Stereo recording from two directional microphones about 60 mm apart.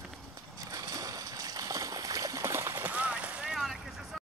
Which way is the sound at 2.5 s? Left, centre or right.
Right.